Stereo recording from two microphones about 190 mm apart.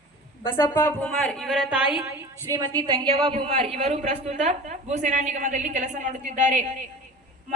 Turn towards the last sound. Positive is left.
turn(degrees=-40)  # may be behind; listen again after turning